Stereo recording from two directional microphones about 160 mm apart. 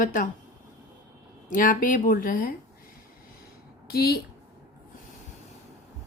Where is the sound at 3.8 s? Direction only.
75° left (ahead or behind).